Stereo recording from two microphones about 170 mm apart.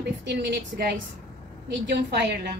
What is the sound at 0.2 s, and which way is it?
A woman's voice, 90° right.